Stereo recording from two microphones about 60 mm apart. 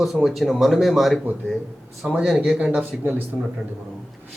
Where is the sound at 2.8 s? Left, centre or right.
Right.